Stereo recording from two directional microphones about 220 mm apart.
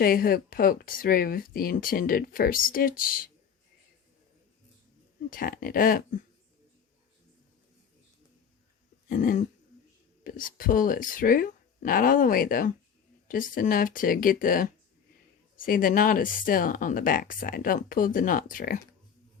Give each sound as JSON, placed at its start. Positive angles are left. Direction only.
{"t": 0.0, "sound": "speech", "side_deg": 40}
{"t": 5.3, "sound": "speech", "side_deg": 40}
{"t": 9.0, "sound": "a sound", "side_deg": 40}
{"t": 10.2, "sound": "speech", "side_deg": 40}